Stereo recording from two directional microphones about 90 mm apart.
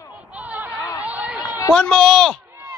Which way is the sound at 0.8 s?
35° left (ahead or behind).